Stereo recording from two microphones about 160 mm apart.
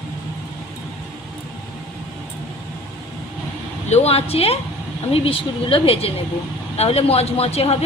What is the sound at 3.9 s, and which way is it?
A woman's voice, 40° left (ahead or behind).